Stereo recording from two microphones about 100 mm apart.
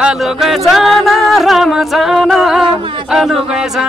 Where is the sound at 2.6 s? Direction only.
60° right (ahead or behind).